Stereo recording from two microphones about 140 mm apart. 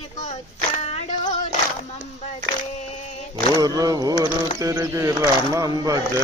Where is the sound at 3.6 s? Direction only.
25° right (ahead or behind).